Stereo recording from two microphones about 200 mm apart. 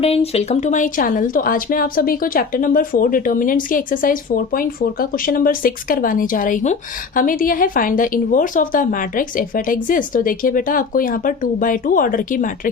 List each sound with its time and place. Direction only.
0.0 s speech: 30° left (ahead or behind)